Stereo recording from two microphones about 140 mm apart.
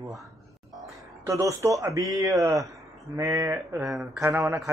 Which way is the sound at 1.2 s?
25° right (ahead or behind).